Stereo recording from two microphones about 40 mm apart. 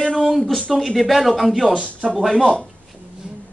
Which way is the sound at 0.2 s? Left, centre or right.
Centre.